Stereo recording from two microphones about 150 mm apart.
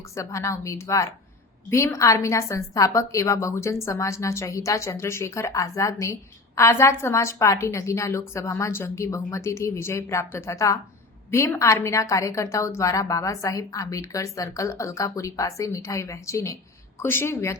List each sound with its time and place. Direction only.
0.1 s a woman's voice: 20° left (ahead or behind)